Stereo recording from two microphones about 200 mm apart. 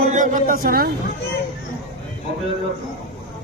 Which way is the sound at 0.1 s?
40° right (ahead or behind).